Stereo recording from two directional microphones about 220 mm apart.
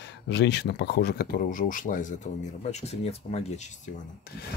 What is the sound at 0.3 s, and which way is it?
Speech, 50° left (ahead or behind).